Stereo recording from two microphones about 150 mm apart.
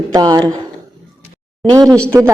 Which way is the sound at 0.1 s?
25° right (ahead or behind).